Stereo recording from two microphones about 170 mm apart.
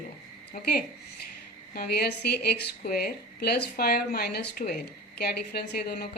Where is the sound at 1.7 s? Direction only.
70° left (ahead or behind).